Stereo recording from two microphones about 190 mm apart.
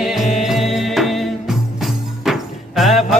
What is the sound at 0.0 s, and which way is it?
Music, centre (ahead or behind).